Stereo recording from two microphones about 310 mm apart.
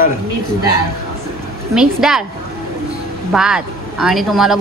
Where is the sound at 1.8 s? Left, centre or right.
Centre.